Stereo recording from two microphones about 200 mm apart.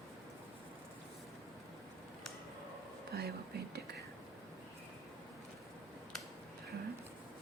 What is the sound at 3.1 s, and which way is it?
Whispering, 50° right (ahead or behind).